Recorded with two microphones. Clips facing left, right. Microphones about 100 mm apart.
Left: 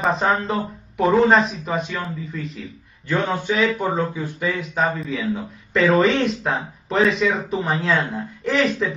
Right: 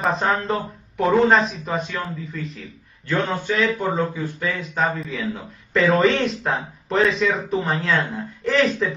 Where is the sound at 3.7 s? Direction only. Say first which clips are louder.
Even; 15° left (ahead or behind).